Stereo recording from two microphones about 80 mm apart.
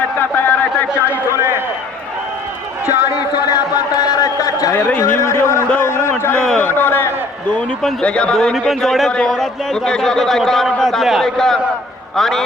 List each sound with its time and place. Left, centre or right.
0.2 s a sound: left
1.4 s run: right
3.3 s a sound: left
4.9 s a man's voice: left
6.3 s a man's voice: centre
6.6 s speech: left
8.0 s a man's voice: centre